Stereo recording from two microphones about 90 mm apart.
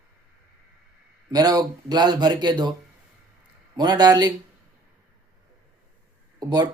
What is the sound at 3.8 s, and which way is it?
Speech, 50° right (ahead or behind).